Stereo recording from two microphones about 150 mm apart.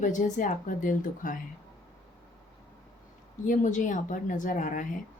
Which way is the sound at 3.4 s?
55° left (ahead or behind).